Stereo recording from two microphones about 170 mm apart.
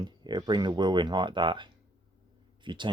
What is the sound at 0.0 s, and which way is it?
Speech, 25° right (ahead or behind).